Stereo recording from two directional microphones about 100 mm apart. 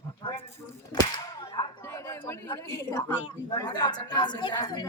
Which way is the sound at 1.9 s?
30° left (ahead or behind).